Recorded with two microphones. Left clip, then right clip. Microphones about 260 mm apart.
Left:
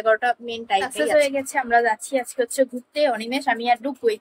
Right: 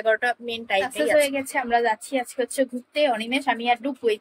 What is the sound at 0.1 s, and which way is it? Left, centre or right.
A woman's voice, centre.